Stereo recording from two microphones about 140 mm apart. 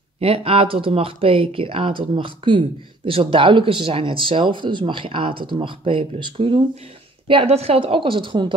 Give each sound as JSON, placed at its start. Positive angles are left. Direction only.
{"t": 0.2, "sound": "speech", "side_deg": -45}